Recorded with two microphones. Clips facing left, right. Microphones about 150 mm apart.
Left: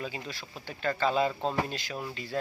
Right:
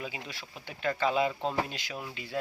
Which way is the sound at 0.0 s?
10° right (ahead or behind).